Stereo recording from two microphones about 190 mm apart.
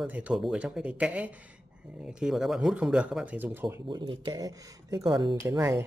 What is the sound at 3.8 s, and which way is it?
Speech, 25° right (ahead or behind).